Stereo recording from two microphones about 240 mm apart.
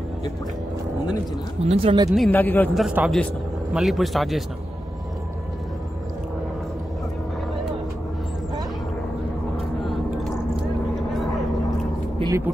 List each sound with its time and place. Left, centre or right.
1.7 s speech: right
2.0 s a man's voice: centre
9.6 s a sound: centre
12.2 s vehicle: centre